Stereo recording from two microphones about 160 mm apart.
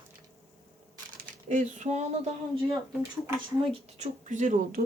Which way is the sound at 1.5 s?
50° right (ahead or behind).